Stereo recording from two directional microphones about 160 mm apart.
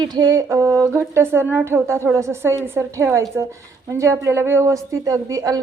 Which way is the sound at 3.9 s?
15° right (ahead or behind).